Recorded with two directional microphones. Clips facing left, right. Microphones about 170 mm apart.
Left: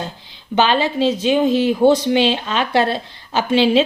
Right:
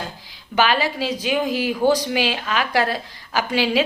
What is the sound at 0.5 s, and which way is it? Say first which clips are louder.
Speech: left 3 dB; 25° left (ahead or behind).